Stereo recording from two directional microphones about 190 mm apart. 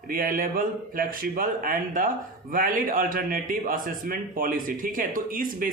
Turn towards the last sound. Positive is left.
turn(degrees=-45)  # may be behind; listen again after turning